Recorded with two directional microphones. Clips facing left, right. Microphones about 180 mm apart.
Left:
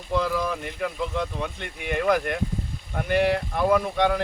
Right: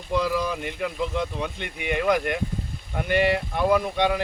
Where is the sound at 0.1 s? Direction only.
15° right (ahead or behind).